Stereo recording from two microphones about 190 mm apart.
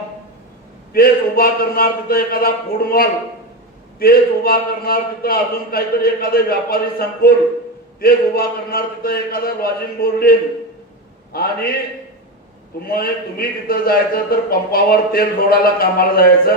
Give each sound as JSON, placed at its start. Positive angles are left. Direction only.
{"t": 0.9, "sound": "a man's voice", "side_deg": 50}
{"t": 12.9, "sound": "a man's voice", "side_deg": 50}